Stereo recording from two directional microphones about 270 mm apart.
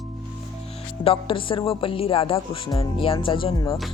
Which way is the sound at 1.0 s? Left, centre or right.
Centre.